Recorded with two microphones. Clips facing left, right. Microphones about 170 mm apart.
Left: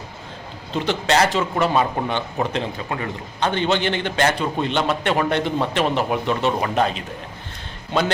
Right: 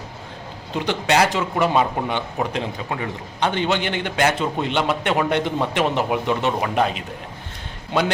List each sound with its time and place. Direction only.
0.7 s a man's voice: 15° right (ahead or behind)